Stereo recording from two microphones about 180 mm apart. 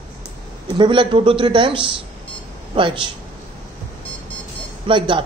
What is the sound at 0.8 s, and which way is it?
A man's voice, 25° right (ahead or behind).